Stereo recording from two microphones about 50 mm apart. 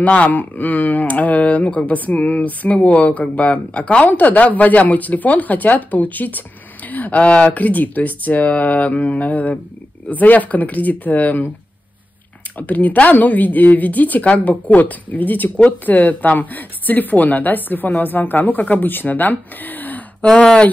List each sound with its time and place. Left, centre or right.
0.0 s speech: left
12.5 s speech: left
20.3 s speech: left